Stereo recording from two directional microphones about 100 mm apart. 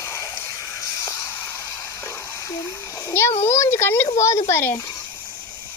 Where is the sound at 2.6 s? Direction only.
30° left (ahead or behind).